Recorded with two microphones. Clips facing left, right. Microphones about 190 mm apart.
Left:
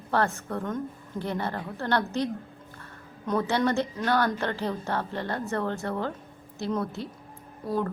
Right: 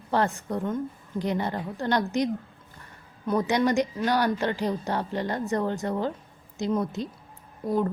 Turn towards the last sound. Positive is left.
turn(degrees=-15)  # may be behind; listen again after turning